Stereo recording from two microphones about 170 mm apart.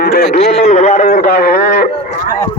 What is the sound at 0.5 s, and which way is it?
A man's voice, 40° left (ahead or behind).